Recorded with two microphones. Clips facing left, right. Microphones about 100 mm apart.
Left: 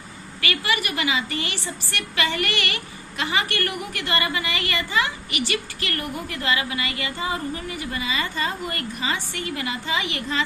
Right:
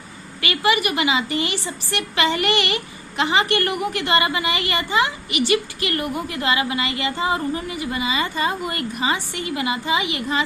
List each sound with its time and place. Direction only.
0.4 s a woman's voice: 20° right (ahead or behind)